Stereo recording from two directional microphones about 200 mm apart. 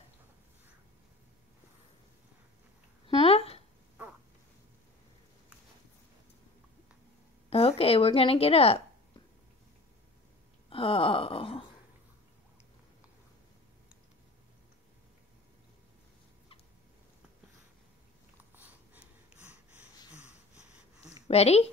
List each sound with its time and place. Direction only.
3.2 s a sound: 30° left (ahead or behind)
7.4 s a woman's voice: 30° left (ahead or behind)
10.7 s a sound: 25° left (ahead or behind)
18.4 s snort: 10° right (ahead or behind)
20.2 s wheeze: 5° right (ahead or behind)
21.3 s a woman's voice: 30° left (ahead or behind)